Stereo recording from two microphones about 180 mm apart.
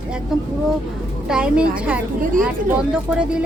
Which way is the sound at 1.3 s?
5° right (ahead or behind).